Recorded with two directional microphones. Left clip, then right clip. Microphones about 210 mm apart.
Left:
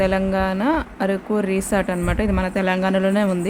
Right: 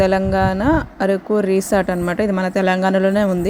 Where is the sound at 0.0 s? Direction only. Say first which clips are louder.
Right 4 dB; 20° right (ahead or behind).